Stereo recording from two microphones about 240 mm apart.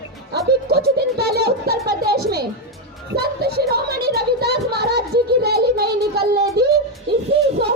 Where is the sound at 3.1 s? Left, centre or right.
Right.